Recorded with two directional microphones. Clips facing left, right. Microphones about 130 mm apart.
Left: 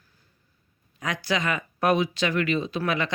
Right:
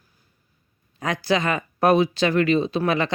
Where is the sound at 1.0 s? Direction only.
30° right (ahead or behind).